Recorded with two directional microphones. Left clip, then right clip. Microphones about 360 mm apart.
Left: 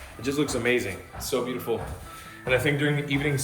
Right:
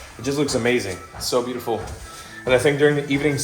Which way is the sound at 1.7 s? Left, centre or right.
Centre.